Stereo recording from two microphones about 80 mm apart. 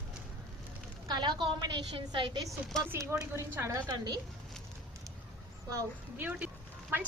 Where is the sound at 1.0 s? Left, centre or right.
Right.